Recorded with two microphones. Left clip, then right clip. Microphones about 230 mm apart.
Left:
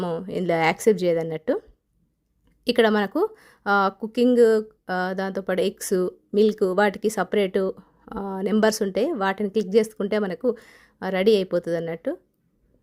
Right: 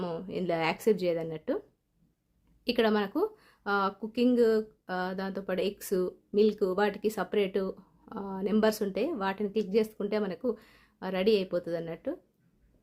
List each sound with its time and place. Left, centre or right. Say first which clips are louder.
0.0 s speech: left 8 dB; left
2.6 s speech: left 8 dB; left